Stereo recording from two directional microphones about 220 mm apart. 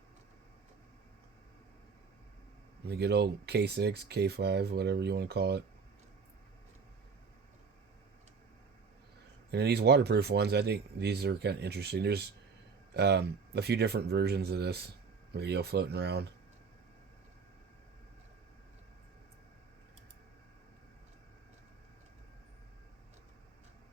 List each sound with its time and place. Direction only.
2.8 s speech: 50° right (ahead or behind)
9.5 s speech: 50° right (ahead or behind)